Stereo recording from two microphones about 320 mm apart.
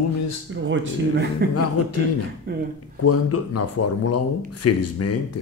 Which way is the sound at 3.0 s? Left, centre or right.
Left.